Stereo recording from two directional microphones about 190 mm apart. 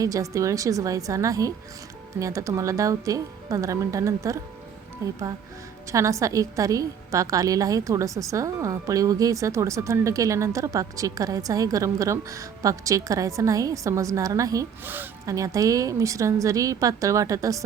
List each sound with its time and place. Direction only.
0.0 s a woman's voice: 15° right (ahead or behind)